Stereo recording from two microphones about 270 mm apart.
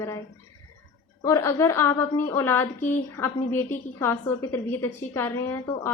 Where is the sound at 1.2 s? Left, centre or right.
Centre.